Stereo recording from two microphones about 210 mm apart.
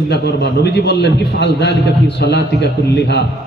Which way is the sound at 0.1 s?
55° left (ahead or behind).